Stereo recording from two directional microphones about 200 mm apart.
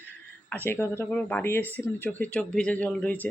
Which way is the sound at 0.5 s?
10° left (ahead or behind).